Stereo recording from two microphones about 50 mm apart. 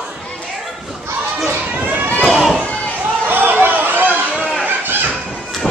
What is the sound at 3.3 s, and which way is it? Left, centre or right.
Chatter, right.